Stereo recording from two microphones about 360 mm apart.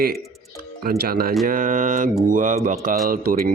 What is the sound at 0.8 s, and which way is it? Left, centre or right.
Speech, right.